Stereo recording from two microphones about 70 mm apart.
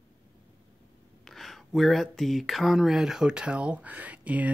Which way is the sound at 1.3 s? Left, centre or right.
Centre.